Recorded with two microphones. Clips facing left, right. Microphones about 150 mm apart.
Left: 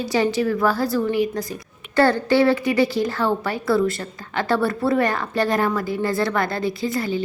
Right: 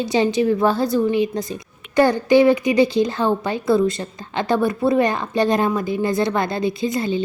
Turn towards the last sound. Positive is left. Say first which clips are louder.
# right 2 dB
turn(degrees=-20)  # may be behind; listen again after turning